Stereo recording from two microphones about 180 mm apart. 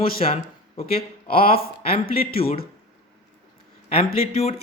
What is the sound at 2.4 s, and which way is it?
Speech, 35° left (ahead or behind).